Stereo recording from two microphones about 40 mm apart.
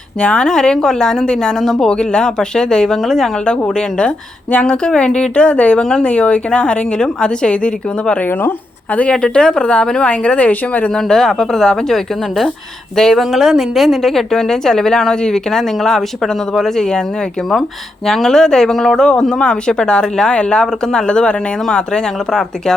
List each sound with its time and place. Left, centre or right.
0.2 s a woman's voice: left
0.4 s a woman's voice: centre
3.8 s a woman's voice: left
8.3 s speech: left
9.1 s a woman's voice: left
10.1 s speech: left
10.9 s a woman's voice: centre
13.3 s a woman's voice: centre
18.0 s a woman's voice: centre